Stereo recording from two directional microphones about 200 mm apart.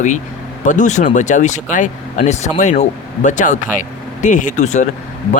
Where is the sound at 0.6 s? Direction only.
40° left (ahead or behind).